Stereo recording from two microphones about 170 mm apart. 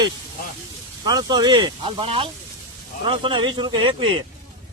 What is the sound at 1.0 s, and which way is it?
Speech, 25° right (ahead or behind).